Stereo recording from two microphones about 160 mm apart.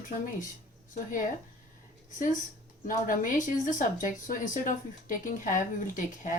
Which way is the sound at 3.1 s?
55° left (ahead or behind).